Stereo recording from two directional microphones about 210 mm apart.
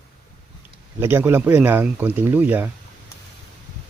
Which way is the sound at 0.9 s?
10° right (ahead or behind).